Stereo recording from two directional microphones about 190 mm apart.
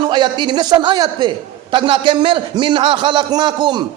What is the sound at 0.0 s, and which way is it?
A man's voice, 25° right (ahead or behind).